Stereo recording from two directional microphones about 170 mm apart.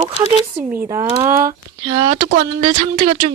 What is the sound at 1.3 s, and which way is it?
Speech, 50° right (ahead or behind).